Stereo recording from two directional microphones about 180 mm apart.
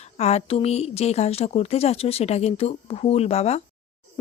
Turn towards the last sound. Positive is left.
turn(degrees=35)  # may be behind; listen again after turning